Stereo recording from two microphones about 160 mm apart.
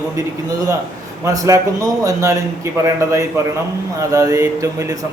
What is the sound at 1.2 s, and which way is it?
A man's voice, 20° right (ahead or behind).